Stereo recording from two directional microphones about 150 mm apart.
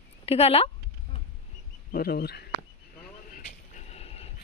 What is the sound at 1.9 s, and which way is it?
Speech, 90° left.